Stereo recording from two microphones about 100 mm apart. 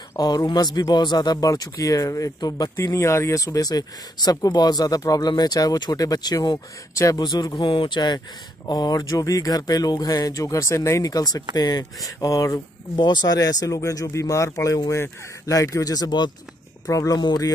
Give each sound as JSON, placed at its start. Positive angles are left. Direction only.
{"t": 0.2, "sound": "speech", "side_deg": 40}
{"t": 2.7, "sound": "speech", "side_deg": 30}
{"t": 16.8, "sound": "speech", "side_deg": 35}
{"t": 17.2, "sound": "speech", "side_deg": 45}